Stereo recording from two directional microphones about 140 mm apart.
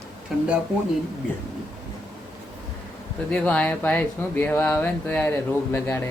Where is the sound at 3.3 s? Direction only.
10° left (ahead or behind).